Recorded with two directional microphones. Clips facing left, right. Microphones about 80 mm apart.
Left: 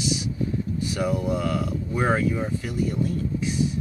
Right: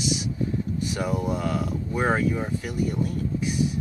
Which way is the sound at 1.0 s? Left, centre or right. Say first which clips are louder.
Left 3 dB; right.